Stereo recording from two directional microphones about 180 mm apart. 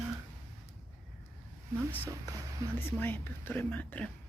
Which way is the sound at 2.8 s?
10° left (ahead or behind).